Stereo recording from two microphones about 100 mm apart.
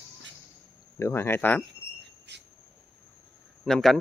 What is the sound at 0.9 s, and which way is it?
Speech, 25° left (ahead or behind).